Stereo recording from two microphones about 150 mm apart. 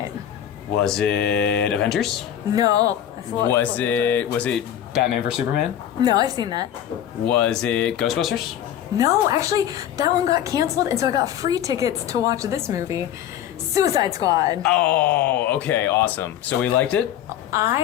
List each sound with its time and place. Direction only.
0.8 s speech: 5° left (ahead or behind)
2.6 s a woman's voice: 25° right (ahead or behind)
3.5 s speech: 10° left (ahead or behind)
4.9 s speech: 5° right (ahead or behind)
6.0 s a woman's voice: 25° right (ahead or behind)
7.3 s speech: 5° left (ahead or behind)
9.0 s a woman's voice: 20° right (ahead or behind)
14.6 s speech: 5° left (ahead or behind)
17.5 s speech: 20° right (ahead or behind)